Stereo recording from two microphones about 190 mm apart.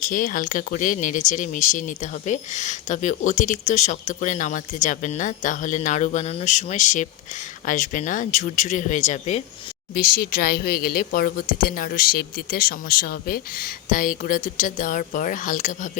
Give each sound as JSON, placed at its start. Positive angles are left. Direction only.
{"t": 0.0, "sound": "a woman's voice", "side_deg": 45}
{"t": 9.9, "sound": "a woman's voice", "side_deg": 55}